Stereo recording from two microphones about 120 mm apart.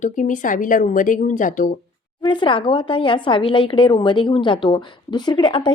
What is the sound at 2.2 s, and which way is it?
Speech, 40° left (ahead or behind).